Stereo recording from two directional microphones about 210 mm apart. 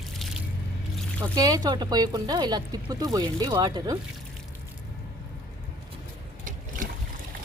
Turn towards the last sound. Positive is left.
turn(degrees=-40)  # may be behind; listen again after turning